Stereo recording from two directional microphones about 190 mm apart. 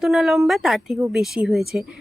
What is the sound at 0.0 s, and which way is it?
A woman's voice, centre (ahead or behind).